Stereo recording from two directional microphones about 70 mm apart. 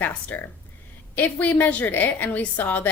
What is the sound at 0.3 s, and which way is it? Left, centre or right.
A woman's voice, left.